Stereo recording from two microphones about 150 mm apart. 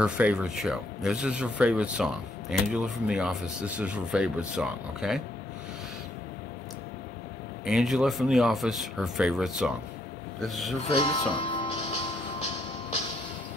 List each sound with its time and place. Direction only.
0.0 s speech: 5° right (ahead or behind)
7.6 s speech: 5° right (ahead or behind)
10.8 s speech: 40° left (ahead or behind)